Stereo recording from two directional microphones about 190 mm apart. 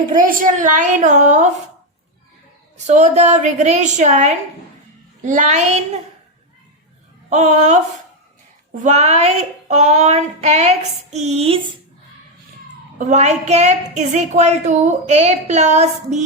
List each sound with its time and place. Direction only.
0.2 s a woman's voice: 45° right (ahead or behind)
2.7 s a woman's voice: 35° right (ahead or behind)
7.3 s a woman's voice: 40° right (ahead or behind)
8.8 s a woman's voice: 35° right (ahead or behind)
13.0 s a woman's voice: 40° right (ahead or behind)